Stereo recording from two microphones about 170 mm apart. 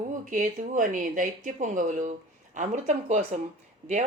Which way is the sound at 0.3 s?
50° right (ahead or behind).